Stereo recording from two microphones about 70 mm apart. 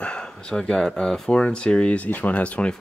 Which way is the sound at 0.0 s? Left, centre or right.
Centre.